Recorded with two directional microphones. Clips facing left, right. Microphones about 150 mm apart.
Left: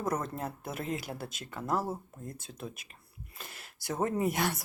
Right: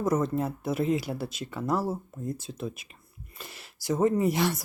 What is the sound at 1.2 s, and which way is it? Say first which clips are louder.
Speech: right 7 dB; 45° left (ahead or behind).